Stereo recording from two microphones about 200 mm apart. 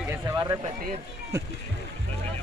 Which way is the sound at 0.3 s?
15° right (ahead or behind).